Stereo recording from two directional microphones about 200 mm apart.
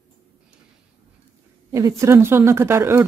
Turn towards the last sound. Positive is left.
turn(degrees=-10)  # may be behind; listen again after turning